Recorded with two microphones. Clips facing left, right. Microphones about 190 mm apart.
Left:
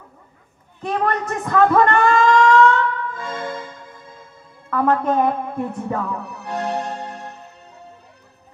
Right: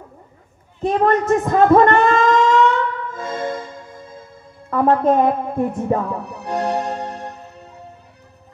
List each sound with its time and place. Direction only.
0.8 s a man's voice: 25° right (ahead or behind)
4.6 s speech: 20° right (ahead or behind)